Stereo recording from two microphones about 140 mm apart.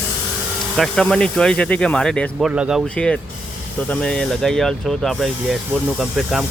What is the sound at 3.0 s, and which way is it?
Speech, 5° left (ahead or behind).